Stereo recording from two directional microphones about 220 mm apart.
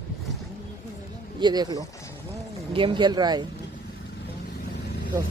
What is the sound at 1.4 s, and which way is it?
Speech, 20° right (ahead or behind).